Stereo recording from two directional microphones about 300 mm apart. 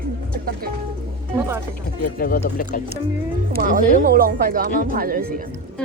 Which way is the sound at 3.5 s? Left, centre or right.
Right.